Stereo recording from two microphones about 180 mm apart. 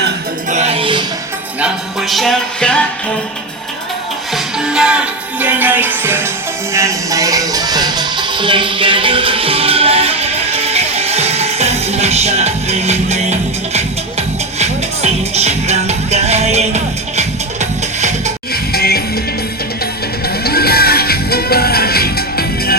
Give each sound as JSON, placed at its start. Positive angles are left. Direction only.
{"t": 0.5, "sound": "music", "side_deg": -35}
{"t": 1.6, "sound": "music", "side_deg": 0}
{"t": 4.4, "sound": "music", "side_deg": -5}
{"t": 18.5, "sound": "music", "side_deg": 60}
{"t": 20.2, "sound": "music", "side_deg": 60}